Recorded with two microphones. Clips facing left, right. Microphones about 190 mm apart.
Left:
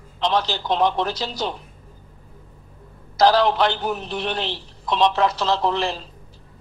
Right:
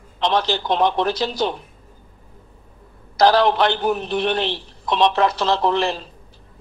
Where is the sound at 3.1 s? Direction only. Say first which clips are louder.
Right 1 dB; 55° right (ahead or behind).